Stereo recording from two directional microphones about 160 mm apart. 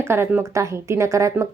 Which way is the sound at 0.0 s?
15° right (ahead or behind).